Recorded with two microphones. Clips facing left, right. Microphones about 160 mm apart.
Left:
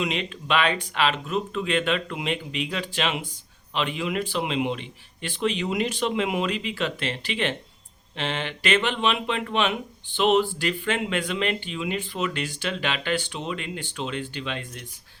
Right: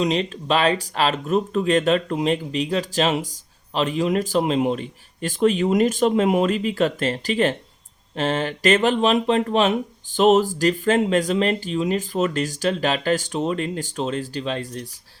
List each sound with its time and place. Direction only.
0.0 s speech: 35° right (ahead or behind)